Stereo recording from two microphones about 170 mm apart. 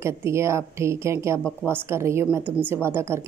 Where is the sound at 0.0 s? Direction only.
15° right (ahead or behind).